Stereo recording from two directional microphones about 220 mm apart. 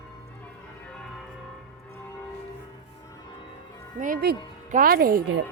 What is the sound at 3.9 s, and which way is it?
Speech, 40° right (ahead or behind).